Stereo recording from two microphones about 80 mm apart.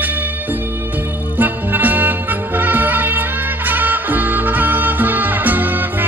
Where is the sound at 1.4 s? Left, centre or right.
Right.